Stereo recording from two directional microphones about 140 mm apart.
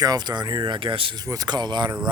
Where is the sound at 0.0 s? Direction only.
30° right (ahead or behind).